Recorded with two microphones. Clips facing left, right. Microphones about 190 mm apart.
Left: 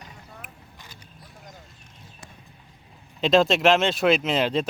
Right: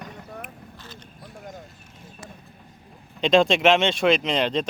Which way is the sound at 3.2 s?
Centre (ahead or behind).